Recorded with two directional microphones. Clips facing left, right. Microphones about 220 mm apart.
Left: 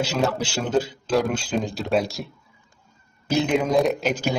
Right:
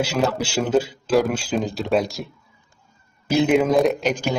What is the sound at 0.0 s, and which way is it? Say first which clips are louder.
Speech: right 2 dB; 10° right (ahead or behind).